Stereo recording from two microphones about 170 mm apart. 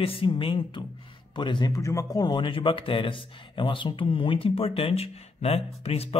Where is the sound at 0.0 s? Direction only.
30° left (ahead or behind).